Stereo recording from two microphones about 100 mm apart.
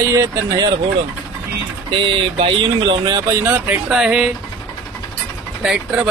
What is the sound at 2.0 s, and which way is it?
Speech, 60° right (ahead or behind).